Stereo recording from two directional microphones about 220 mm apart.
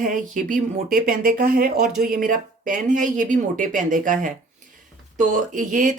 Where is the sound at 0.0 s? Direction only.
35° right (ahead or behind).